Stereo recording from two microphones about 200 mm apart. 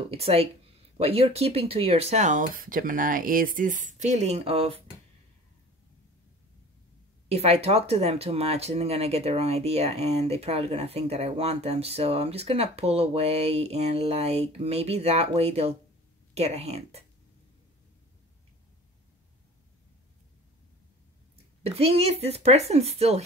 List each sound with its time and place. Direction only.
0.1 s speech: 30° right (ahead or behind)
7.2 s speech: 30° right (ahead or behind)
21.6 s speech: 30° right (ahead or behind)